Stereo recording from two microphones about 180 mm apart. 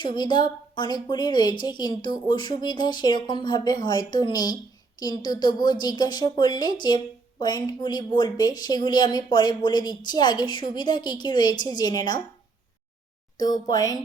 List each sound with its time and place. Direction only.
0.0 s a woman's voice: 25° left (ahead or behind)
13.3 s a woman's voice: 20° left (ahead or behind)